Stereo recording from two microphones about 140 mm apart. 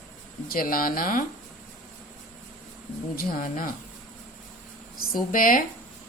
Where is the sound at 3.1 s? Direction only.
85° left.